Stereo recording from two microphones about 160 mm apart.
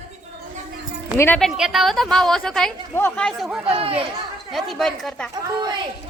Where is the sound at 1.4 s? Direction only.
Centre (ahead or behind).